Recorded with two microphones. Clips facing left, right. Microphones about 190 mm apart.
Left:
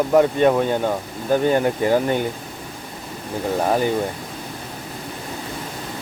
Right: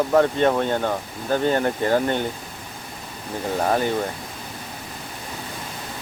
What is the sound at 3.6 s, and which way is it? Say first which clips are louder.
Speech: left 2 dB; 10° left (ahead or behind).